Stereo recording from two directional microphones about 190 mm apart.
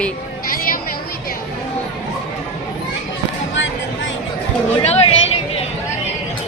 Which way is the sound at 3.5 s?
75° left (ahead or behind).